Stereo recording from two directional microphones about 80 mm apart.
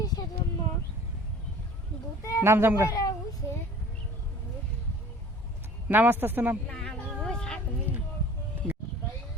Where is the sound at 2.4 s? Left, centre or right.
Right.